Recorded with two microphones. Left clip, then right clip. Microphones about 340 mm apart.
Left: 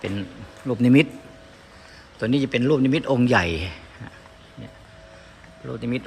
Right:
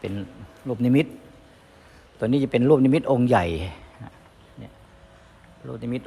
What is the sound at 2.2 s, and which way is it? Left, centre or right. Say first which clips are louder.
Speech: right 1 dB; centre.